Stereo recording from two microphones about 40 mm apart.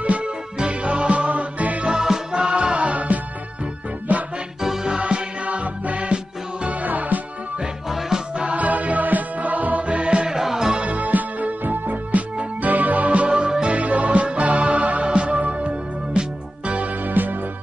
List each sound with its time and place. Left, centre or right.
0.0 s music: right
4.8 s music: right
8.5 s music: right
10.3 s music: centre
10.7 s music: right
13.5 s music: right
13.7 s music: right
17.0 s music: right